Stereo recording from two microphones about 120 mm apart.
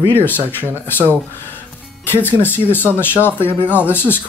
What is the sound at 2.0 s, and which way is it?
Speech, 15° left (ahead or behind).